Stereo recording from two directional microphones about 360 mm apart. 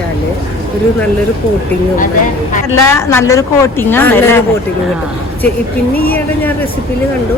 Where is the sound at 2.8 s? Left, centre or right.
Centre.